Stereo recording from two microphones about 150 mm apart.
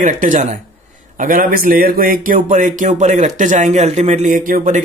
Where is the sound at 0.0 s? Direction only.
60° right (ahead or behind).